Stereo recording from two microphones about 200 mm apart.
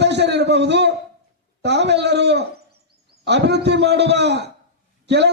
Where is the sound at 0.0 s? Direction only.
60° right (ahead or behind).